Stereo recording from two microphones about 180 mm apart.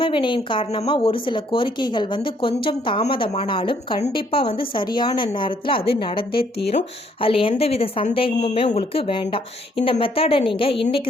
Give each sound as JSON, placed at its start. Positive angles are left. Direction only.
{"t": 0.0, "sound": "a woman's voice", "side_deg": 25}